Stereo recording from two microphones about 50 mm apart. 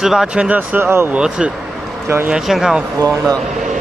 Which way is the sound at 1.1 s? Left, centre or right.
Centre.